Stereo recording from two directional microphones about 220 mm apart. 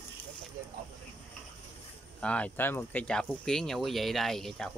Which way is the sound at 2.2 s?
5° left (ahead or behind).